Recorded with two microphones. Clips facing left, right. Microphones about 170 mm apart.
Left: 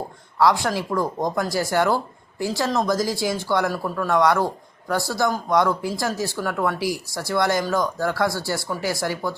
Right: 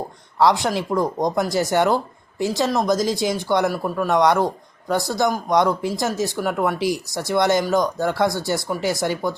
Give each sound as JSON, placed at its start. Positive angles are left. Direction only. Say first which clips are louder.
{"t": 0.3, "sound": "speech", "louder": "right 1 dB", "side_deg": -20}